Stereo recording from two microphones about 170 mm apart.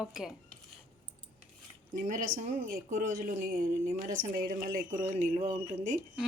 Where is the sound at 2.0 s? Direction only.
50° right (ahead or behind).